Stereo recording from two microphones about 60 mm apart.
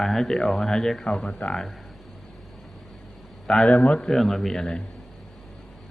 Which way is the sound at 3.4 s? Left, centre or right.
Centre.